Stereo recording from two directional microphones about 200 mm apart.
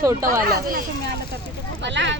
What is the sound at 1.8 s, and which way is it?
Speech, 60° right (ahead or behind).